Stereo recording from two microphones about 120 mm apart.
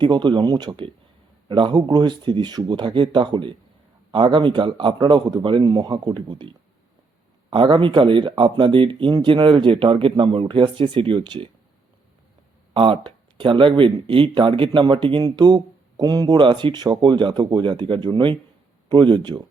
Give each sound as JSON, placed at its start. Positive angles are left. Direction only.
{"t": 0.0, "sound": "speech", "side_deg": -40}
{"t": 7.5, "sound": "speech", "side_deg": -45}
{"t": 12.7, "sound": "speech", "side_deg": -45}